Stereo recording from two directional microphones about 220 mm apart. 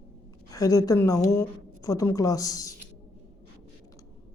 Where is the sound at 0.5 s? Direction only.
15° left (ahead or behind).